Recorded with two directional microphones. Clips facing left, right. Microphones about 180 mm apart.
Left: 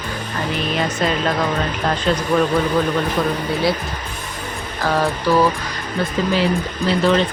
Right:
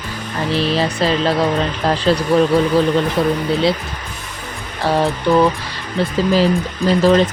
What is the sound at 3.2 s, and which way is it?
Speech, 30° right (ahead or behind).